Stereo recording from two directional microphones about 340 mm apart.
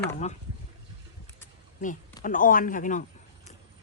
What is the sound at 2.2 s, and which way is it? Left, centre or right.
Speech, left.